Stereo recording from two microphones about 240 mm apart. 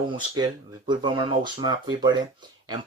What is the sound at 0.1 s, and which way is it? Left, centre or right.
Speech, centre.